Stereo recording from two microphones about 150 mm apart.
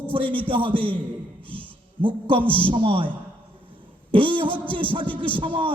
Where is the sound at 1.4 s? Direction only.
10° left (ahead or behind).